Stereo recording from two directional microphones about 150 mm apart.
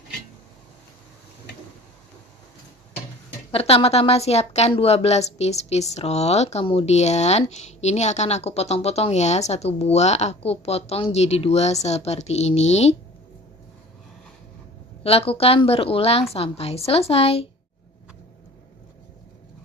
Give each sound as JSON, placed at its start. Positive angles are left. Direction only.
{"t": 3.5, "sound": "speech", "side_deg": 40}
{"t": 15.0, "sound": "a woman's voice", "side_deg": 40}